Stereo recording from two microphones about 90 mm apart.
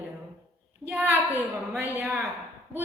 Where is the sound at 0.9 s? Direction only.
15° right (ahead or behind).